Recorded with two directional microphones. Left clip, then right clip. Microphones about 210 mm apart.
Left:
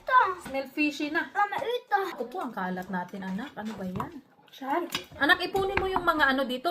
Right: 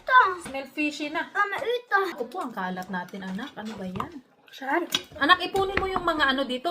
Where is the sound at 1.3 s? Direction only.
Centre (ahead or behind).